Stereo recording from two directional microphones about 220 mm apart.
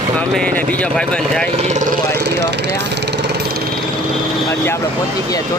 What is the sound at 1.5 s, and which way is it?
Lawn mower, 30° right (ahead or behind).